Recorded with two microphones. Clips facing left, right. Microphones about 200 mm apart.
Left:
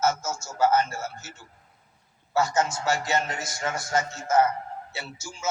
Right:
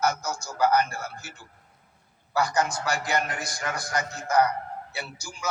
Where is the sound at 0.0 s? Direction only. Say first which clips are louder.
Left 1 dB; 25° left (ahead or behind).